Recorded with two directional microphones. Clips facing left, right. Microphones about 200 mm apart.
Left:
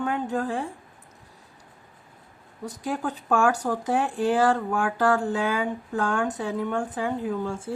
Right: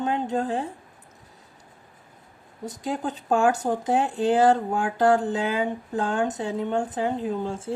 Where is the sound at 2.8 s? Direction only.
20° right (ahead or behind).